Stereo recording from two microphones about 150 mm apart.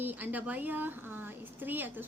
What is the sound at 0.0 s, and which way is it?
Speech, 10° right (ahead or behind).